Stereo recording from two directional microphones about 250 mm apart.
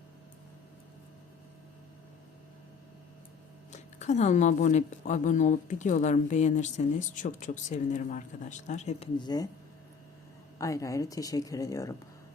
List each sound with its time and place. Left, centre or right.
3.7 s speech: left
10.6 s speech: centre